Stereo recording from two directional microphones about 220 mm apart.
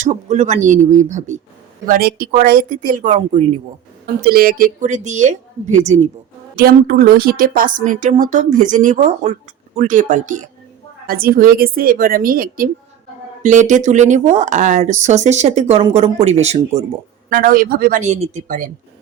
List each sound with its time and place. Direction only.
0.0 s a woman's voice: 30° right (ahead or behind)
4.0 s a woman's voice: 45° right (ahead or behind)
6.6 s a woman's voice: 45° right (ahead or behind)